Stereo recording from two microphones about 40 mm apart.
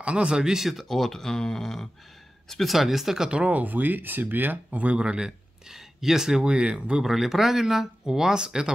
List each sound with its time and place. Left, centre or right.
0.0 s speech: right
0.8 s speech: centre
2.5 s speech: centre
3.4 s speech: right
4.6 s speech: right
5.7 s speech: centre
6.4 s speech: right
7.0 s speech: centre